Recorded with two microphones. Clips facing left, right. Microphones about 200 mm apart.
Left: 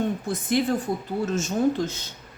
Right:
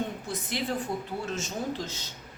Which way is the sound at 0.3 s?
50° left (ahead or behind).